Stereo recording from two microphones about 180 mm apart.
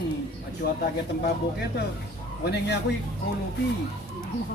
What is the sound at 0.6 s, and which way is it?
Speech, 60° left (ahead or behind).